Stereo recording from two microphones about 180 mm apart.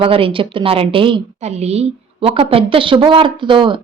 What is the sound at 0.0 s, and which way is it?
A woman's voice, 30° right (ahead or behind).